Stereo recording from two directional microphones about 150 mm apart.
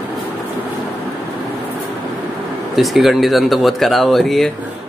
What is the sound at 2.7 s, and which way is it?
Speech, centre (ahead or behind).